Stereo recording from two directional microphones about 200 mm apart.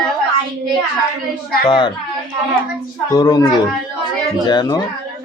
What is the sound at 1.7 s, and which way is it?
Speech, 20° left (ahead or behind).